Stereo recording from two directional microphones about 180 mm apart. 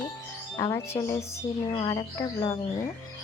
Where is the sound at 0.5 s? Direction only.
15° left (ahead or behind).